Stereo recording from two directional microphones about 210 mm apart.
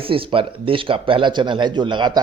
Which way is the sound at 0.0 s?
25° right (ahead or behind).